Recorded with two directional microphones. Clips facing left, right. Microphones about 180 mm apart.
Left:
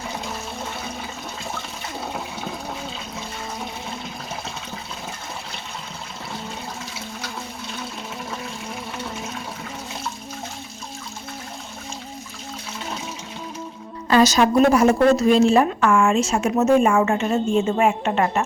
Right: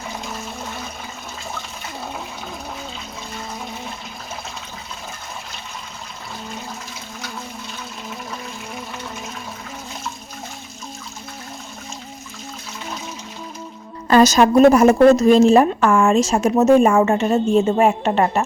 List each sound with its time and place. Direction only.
14.1 s a woman's voice: 45° right (ahead or behind)